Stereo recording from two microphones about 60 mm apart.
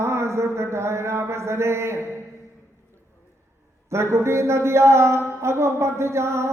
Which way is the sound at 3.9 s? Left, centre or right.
Right.